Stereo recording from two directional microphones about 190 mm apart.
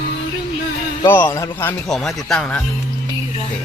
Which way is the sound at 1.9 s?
Centre (ahead or behind).